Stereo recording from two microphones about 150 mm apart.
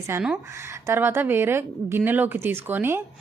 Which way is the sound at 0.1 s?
10° right (ahead or behind).